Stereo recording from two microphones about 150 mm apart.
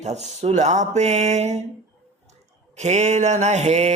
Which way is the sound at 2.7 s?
50° right (ahead or behind).